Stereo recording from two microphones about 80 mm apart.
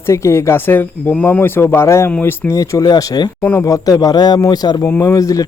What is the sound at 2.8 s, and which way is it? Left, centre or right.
Speech, left.